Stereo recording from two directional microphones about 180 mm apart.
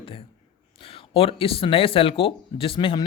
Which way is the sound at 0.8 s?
30° left (ahead or behind).